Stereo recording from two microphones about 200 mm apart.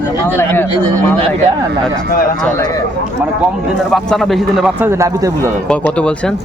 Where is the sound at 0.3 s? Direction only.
10° left (ahead or behind).